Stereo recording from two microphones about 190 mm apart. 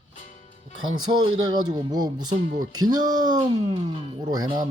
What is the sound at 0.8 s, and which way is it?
Speech, 90° right.